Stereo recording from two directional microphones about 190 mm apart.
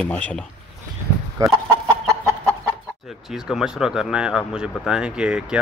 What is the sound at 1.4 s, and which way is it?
Speech, 15° right (ahead or behind).